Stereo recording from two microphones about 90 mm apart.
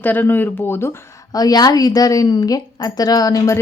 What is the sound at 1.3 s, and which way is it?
A woman's voice, 45° left (ahead or behind).